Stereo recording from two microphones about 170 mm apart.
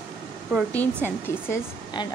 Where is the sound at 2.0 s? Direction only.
25° left (ahead or behind).